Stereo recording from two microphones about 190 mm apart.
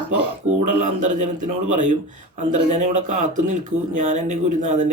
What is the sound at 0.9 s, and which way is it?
Speech, 45° right (ahead or behind).